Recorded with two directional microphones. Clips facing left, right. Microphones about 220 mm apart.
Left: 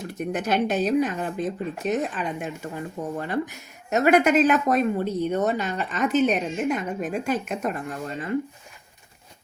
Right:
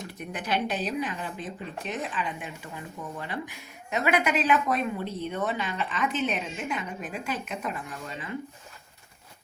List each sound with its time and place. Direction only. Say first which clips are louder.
0.1 s speech: left 7 dB; 45° left (ahead or behind)